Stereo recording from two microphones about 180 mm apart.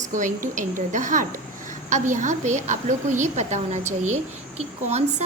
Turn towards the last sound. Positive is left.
turn(degrees=-35)  # may be behind; listen again after turning